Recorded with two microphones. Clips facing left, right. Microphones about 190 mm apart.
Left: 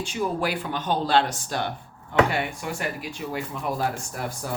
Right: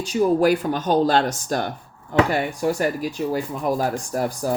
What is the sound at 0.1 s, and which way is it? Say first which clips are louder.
Speech: right 11 dB; 40° right (ahead or behind).